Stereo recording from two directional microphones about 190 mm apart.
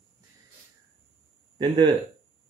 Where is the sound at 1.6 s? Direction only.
25° right (ahead or behind).